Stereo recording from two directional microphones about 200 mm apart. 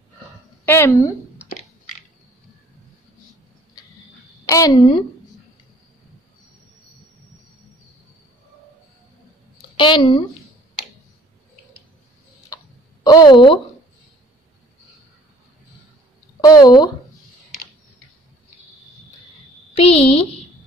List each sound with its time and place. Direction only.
0.7 s a woman's voice: 10° left (ahead or behind)
4.5 s a woman's voice: 15° left (ahead or behind)
9.8 s speech: 25° left (ahead or behind)
13.0 s speech: 20° left (ahead or behind)
16.3 s speech: 20° left (ahead or behind)
19.8 s speech: 30° left (ahead or behind)